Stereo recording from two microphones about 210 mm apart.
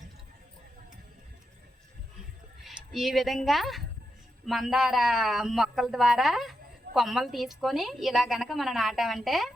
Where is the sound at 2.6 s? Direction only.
Centre (ahead or behind).